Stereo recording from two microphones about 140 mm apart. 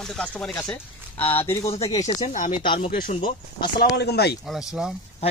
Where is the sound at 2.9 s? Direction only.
70° left (ahead or behind).